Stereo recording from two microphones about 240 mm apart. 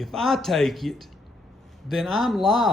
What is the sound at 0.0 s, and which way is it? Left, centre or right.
Speech, centre.